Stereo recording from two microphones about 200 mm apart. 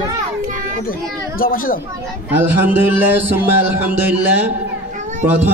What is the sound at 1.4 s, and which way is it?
Speech, 45° left (ahead or behind).